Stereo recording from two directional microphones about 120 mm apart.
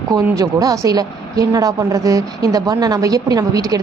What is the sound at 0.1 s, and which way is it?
A woman's voice, 30° right (ahead or behind).